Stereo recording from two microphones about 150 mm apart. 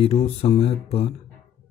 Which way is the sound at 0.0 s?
40° left (ahead or behind).